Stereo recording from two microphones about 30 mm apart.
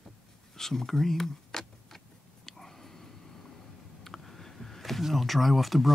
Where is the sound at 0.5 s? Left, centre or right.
Centre.